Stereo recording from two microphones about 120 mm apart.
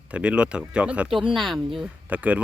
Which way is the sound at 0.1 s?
10° right (ahead or behind).